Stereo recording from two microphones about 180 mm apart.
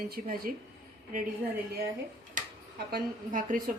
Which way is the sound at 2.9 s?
55° right (ahead or behind).